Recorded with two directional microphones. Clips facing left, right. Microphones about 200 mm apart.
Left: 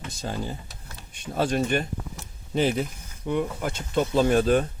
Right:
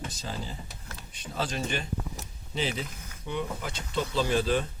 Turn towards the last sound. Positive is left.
turn(degrees=50)  # may be behind; listen again after turning